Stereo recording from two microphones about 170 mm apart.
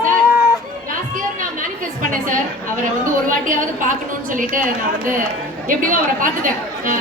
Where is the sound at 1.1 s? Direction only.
50° right (ahead or behind).